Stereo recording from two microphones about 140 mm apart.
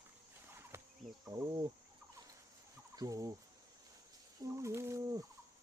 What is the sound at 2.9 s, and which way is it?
Fowl, 25° right (ahead or behind).